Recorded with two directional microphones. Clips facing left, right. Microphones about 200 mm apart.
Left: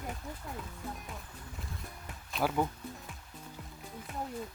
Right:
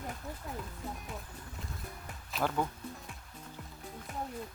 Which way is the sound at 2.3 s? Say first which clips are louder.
Left 2 dB; 10° left (ahead or behind).